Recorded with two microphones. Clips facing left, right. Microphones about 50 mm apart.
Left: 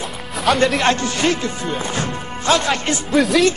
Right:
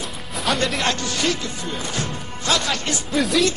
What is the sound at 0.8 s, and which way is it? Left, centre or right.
Speech, left.